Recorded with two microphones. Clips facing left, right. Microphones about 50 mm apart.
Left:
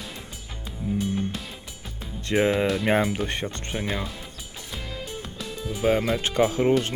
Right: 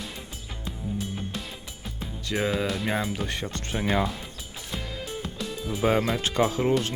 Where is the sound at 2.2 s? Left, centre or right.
Left.